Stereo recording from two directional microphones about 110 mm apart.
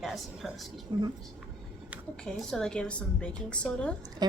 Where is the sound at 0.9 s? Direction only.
40° right (ahead or behind).